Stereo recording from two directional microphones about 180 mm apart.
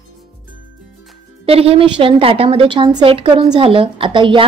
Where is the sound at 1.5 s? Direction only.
30° right (ahead or behind).